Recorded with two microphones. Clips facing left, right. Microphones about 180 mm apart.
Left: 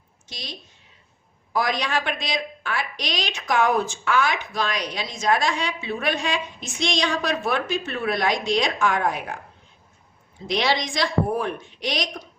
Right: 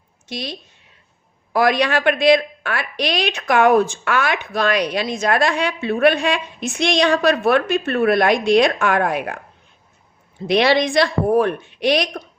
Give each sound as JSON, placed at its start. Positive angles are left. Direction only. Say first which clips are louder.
{"t": 0.3, "sound": "a woman's voice", "louder": "right 11 dB", "side_deg": -60}
{"t": 1.5, "sound": "a woman's voice", "louder": "right 7 dB", "side_deg": -65}
{"t": 10.4, "sound": "a woman's voice", "louder": "right 8 dB", "side_deg": -65}